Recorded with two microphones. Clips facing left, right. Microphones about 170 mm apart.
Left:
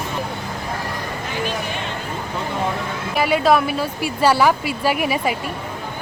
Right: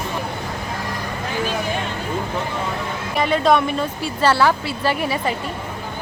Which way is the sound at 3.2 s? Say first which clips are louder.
Even; 5° left (ahead or behind).